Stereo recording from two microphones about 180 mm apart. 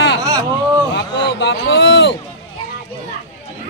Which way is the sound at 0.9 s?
80° left.